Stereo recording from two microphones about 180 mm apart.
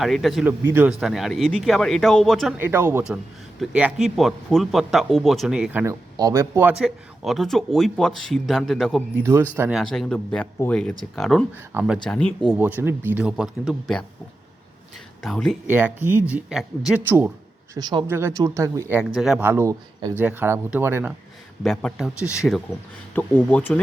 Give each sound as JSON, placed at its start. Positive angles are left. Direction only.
{"t": 0.0, "sound": "a man's voice", "side_deg": 0}
{"t": 0.7, "sound": "a man's voice", "side_deg": -10}
{"t": 2.6, "sound": "a man's voice", "side_deg": -10}
{"t": 5.8, "sound": "a man's voice", "side_deg": -20}
{"t": 9.2, "sound": "a man's voice", "side_deg": -10}
{"t": 11.5, "sound": "speech", "side_deg": -10}
{"t": 12.0, "sound": "a man's voice", "side_deg": 5}
{"t": 12.5, "sound": "speech", "side_deg": -10}
{"t": 15.2, "sound": "a man's voice", "side_deg": 0}
{"t": 15.6, "sound": "speech", "side_deg": -10}
{"t": 17.7, "sound": "speech", "side_deg": -20}
{"t": 18.9, "sound": "speech", "side_deg": -5}
{"t": 21.6, "sound": "a man's voice", "side_deg": 5}
{"t": 23.1, "sound": "speech", "side_deg": 10}